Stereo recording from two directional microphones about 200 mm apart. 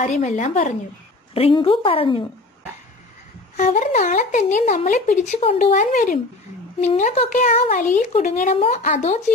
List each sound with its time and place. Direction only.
0.0 s speech: 35° left (ahead or behind)
1.3 s a woman's voice: 25° left (ahead or behind)
3.5 s speech: 40° left (ahead or behind)